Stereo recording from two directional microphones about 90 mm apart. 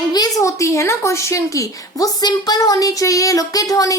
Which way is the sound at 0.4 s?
35° left (ahead or behind).